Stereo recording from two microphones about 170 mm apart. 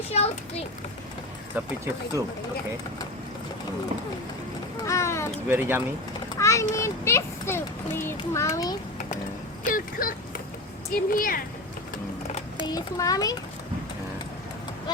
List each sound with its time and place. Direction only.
0.1 s a child's voice: 40° left (ahead or behind)
1.5 s speech: 15° right (ahead or behind)
4.9 s a sound: 15° left (ahead or behind)
5.5 s speech: 15° right (ahead or behind)
6.4 s a child's voice: 20° left (ahead or behind)
9.6 s speech: 55° left (ahead or behind)
12.6 s a child's voice: 20° left (ahead or behind)